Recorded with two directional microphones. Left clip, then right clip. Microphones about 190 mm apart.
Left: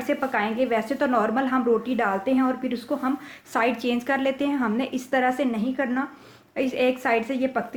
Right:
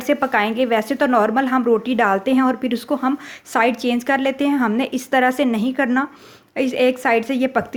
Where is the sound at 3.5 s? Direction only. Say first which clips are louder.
Right 6 dB; 35° right (ahead or behind).